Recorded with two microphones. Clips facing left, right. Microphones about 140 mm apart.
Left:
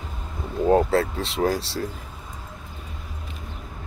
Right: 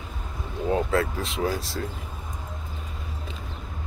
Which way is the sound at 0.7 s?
35° left (ahead or behind).